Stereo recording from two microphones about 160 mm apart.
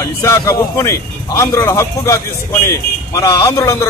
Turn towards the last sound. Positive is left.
turn(degrees=20)  # may be behind; listen again after turning